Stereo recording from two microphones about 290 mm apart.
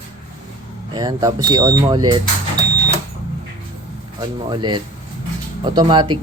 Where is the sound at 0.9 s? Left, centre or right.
Centre.